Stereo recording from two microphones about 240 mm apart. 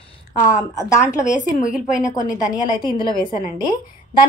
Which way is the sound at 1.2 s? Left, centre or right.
Left.